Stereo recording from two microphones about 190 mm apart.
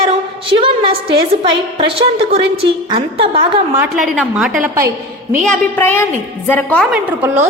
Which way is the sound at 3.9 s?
Centre (ahead or behind).